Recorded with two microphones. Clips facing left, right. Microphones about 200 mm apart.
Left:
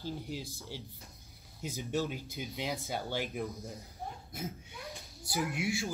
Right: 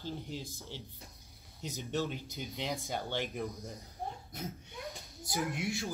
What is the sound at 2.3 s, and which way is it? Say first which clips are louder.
Speech: left 1 dB; centre (ahead or behind).